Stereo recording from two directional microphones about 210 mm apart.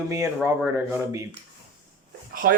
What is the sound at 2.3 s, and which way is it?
Speech, 45° right (ahead or behind).